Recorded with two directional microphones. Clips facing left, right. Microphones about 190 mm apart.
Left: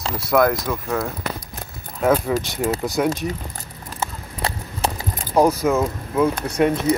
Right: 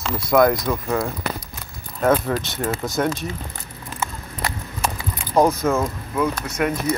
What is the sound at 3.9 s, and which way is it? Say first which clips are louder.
Keys jangling: left 1 dB; 35° left (ahead or behind).